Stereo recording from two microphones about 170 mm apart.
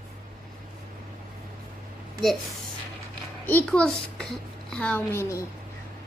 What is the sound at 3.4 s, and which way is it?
A child's voice, 10° left (ahead or behind).